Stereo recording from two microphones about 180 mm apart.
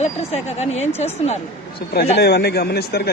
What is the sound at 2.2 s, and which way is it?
Speech, 65° left (ahead or behind).